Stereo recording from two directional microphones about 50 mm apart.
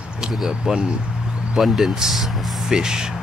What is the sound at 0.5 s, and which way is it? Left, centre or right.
Speech, centre.